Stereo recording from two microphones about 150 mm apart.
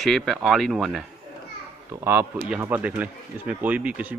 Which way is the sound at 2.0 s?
15° right (ahead or behind).